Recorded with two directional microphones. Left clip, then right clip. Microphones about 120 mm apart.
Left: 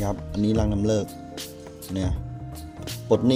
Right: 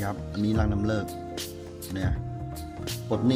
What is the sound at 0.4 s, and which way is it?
Speech, 20° left (ahead or behind).